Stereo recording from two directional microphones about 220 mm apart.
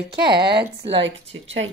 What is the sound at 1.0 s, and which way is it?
Speech, 55° right (ahead or behind).